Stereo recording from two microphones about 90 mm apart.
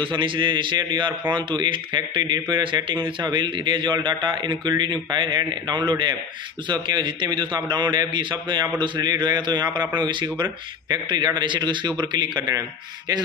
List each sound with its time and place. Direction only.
0.0 s a man's voice: 65° right (ahead or behind)